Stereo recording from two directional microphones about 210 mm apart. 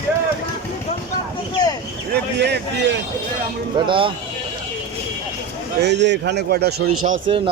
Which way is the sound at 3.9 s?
25° right (ahead or behind).